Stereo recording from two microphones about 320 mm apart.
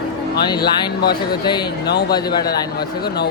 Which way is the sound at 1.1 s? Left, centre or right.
Centre.